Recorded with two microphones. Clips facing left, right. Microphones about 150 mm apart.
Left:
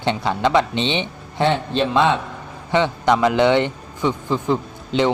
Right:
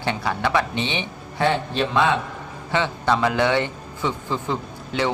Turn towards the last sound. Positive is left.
turn(degrees=15)  # may be behind; listen again after turning